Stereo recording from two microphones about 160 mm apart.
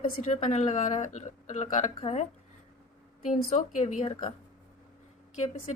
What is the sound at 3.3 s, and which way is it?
Speech, 55° left (ahead or behind).